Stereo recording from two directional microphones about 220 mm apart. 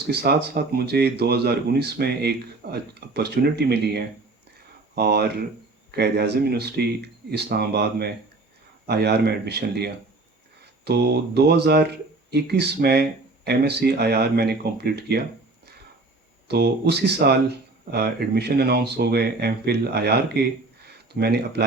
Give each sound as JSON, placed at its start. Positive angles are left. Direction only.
{"t": 0.1, "sound": "speech", "side_deg": -45}
{"t": 16.5, "sound": "speech", "side_deg": -45}